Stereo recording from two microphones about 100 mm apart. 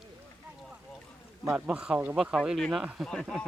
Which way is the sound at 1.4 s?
10° right (ahead or behind).